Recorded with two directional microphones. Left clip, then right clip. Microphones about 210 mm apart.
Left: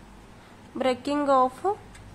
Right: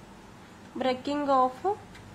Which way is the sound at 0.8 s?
20° left (ahead or behind).